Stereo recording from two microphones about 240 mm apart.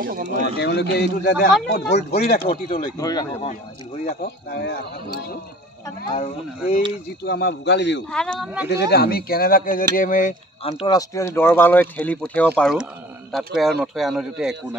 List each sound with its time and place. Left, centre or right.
0.0 s speech: right
0.6 s speech: left
2.4 s speech: left
4.0 s speech: left
6.1 s speech: left
7.2 s speech: left
8.1 s a man's voice: centre
8.6 s a man's voice: left; by 14.8 s centre